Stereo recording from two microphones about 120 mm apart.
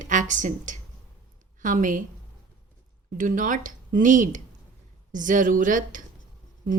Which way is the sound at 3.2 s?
90° right.